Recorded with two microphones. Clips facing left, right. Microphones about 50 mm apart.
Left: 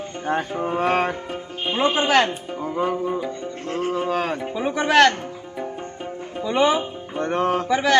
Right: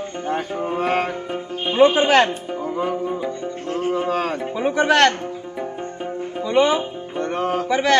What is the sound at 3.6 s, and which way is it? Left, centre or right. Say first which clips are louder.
Music: right 1 dB; left.